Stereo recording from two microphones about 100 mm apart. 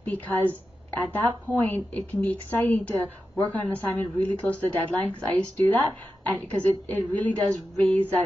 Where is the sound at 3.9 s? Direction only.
15° left (ahead or behind).